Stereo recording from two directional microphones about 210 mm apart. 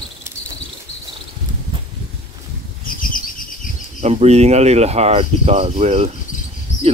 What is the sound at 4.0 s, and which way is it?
Speech, 30° right (ahead or behind).